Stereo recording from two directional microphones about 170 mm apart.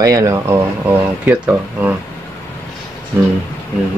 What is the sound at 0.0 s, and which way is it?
A man's voice, 20° right (ahead or behind).